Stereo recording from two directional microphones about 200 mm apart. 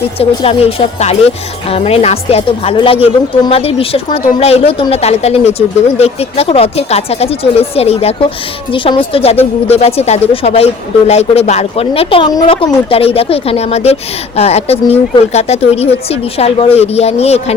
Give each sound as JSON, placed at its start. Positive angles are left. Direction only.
{"t": 0.2, "sound": "a woman's voice", "side_deg": 30}